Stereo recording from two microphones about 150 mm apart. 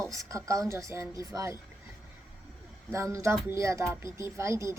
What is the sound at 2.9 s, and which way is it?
A woman's voice, 20° right (ahead or behind).